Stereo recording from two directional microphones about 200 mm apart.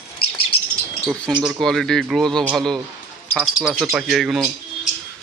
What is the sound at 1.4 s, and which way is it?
Speech, centre (ahead or behind).